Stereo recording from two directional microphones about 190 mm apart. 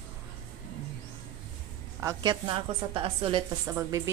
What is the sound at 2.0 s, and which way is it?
A woman's voice, 20° right (ahead or behind).